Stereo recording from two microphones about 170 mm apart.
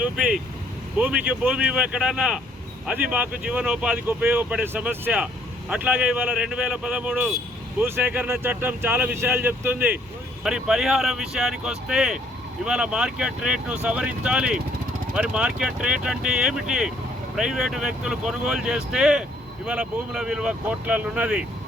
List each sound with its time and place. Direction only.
0.0 s speech: 5° right (ahead or behind)